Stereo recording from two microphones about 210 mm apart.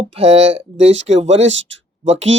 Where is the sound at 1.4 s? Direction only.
60° right (ahead or behind).